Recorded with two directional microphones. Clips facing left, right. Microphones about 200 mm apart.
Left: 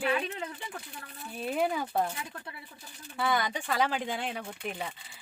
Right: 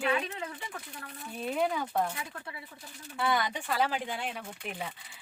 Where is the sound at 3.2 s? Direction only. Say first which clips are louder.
Even; centre (ahead or behind).